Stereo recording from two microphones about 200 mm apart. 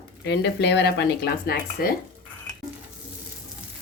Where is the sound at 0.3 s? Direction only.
60° left (ahead or behind).